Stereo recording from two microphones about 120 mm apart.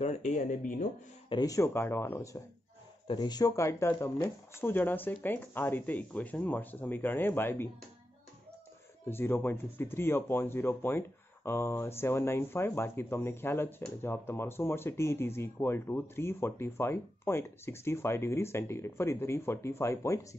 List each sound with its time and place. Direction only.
0.0 s speech: 70° left (ahead or behind); by 0.8 s 90° left
1.3 s speech: 30° left (ahead or behind)
3.1 s speech: 35° left (ahead or behind); by 7.7 s 20° left (ahead or behind)
9.0 s speech: 20° left (ahead or behind)